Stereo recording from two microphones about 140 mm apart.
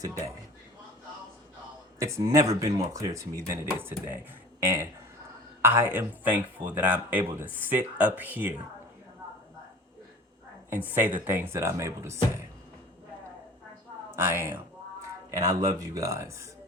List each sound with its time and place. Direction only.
2.0 s speech: 20° right (ahead or behind)
10.7 s speech: 15° right (ahead or behind)
14.2 s speech: 15° right (ahead or behind)